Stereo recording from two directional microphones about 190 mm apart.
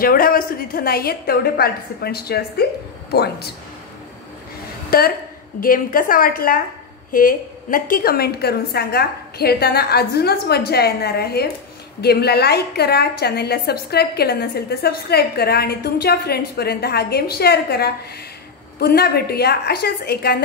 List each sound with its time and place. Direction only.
0.0 s a woman's voice: 50° left (ahead or behind)
4.9 s a woman's voice: 50° left (ahead or behind)